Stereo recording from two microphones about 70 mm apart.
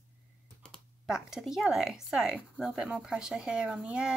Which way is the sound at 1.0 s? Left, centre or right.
Centre.